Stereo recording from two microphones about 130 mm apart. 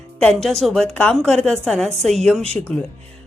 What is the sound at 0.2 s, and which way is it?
A woman's voice, 5° left (ahead or behind).